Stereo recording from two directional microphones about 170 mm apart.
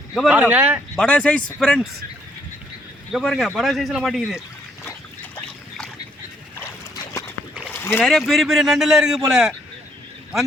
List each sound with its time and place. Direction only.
0.1 s speech: 5° right (ahead or behind)
0.9 s a man's voice: 5° left (ahead or behind)
3.1 s a man's voice: centre (ahead or behind)
6.6 s dog: 15° left (ahead or behind)
7.7 s rowboat: 15° left (ahead or behind)
8.0 s a man's voice: centre (ahead or behind)